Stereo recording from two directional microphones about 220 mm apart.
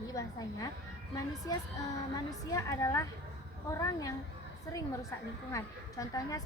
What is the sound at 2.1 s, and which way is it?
A woman's voice, 15° left (ahead or behind).